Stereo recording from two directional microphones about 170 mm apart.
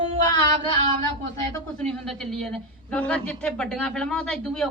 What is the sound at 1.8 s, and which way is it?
A man's voice, 5° left (ahead or behind).